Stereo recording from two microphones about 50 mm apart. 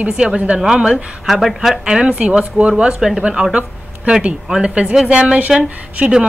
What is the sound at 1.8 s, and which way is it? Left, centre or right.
A woman's voice, centre.